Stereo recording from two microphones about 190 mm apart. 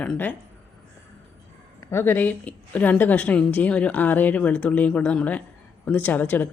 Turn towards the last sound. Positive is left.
turn(degrees=10)  # may be behind; listen again after turning